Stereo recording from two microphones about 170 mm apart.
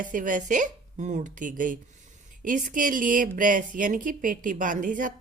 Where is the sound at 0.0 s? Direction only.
50° right (ahead or behind).